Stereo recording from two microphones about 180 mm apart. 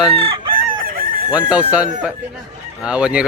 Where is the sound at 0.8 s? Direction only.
55° right (ahead or behind).